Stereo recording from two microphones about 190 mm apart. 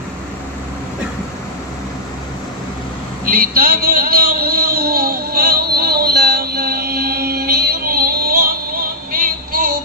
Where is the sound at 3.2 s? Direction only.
50° right (ahead or behind).